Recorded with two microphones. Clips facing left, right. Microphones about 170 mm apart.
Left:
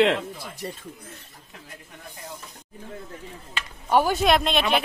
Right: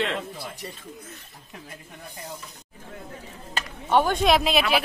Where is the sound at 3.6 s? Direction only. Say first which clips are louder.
Right 3 dB; 40° right (ahead or behind).